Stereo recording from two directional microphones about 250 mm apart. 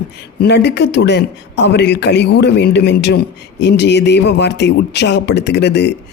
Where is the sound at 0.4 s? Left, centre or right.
Left.